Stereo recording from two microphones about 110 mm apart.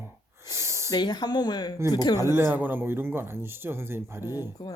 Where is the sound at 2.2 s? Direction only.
20° right (ahead or behind).